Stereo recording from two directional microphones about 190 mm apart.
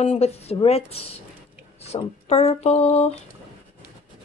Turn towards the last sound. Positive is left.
turn(degrees=35)  # may be behind; listen again after turning